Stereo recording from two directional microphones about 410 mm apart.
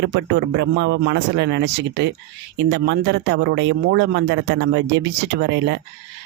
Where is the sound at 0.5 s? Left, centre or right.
Right.